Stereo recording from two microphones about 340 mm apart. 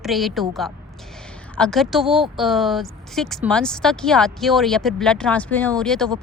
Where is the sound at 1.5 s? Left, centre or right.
Centre.